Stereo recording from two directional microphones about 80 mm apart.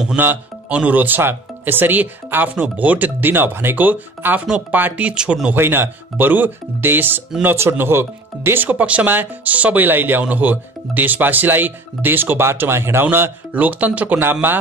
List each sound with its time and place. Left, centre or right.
0.2 s speech: centre
4.5 s speech: centre
5.5 s speech: right